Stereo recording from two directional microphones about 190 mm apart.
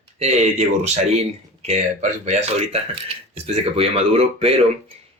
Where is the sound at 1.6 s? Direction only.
35° right (ahead or behind).